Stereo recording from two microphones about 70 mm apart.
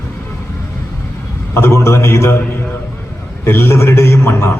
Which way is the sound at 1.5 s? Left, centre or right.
Left.